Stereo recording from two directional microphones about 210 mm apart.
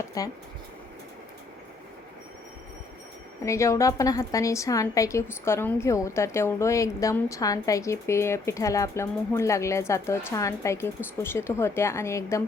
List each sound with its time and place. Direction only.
0.2 s a woman's voice: 15° left (ahead or behind)
3.4 s a woman's voice: 15° left (ahead or behind)